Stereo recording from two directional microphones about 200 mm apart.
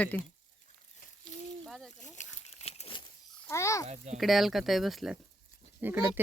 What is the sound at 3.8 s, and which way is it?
Speech, 35° right (ahead or behind).